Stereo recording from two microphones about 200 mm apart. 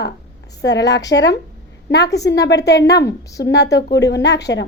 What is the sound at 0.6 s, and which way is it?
A woman's voice, 60° left (ahead or behind).